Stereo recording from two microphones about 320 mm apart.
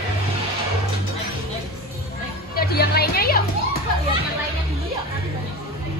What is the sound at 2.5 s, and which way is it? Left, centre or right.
Music, left.